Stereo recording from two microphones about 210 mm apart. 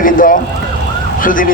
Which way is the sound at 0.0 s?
40° left (ahead or behind).